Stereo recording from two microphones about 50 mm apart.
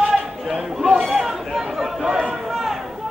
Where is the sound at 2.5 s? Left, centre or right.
Centre.